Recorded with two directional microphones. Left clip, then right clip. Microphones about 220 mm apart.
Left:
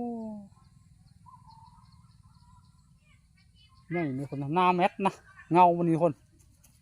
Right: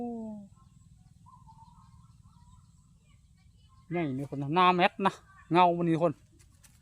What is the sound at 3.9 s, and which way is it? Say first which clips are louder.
Speech: left 1 dB; 25° left (ahead or behind).